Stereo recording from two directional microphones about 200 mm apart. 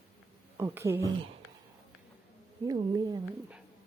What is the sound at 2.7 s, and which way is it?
Speech, 20° right (ahead or behind).